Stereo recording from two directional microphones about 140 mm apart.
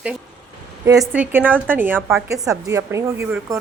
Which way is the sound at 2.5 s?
20° right (ahead or behind).